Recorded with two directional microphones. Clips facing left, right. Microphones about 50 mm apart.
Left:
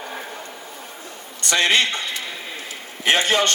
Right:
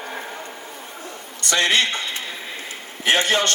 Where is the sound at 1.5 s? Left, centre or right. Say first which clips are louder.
Left 1 dB; left.